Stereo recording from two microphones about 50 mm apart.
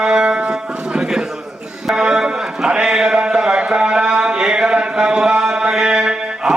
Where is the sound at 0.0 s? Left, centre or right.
Centre.